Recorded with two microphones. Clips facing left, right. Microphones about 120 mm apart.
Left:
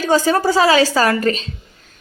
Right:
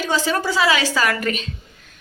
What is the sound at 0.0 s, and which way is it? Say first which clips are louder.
A woman's voice: left 6 dB; 45° left (ahead or behind).